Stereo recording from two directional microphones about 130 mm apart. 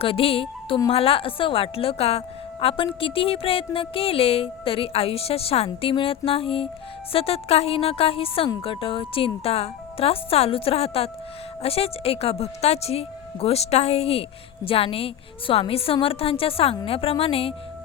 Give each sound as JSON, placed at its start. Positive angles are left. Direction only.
{"t": 0.0, "sound": "a woman's voice", "side_deg": 45}